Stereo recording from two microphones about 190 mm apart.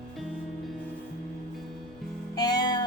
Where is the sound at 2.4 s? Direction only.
20° left (ahead or behind).